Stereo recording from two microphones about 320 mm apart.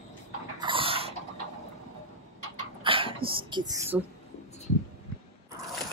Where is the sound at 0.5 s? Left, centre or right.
Centre.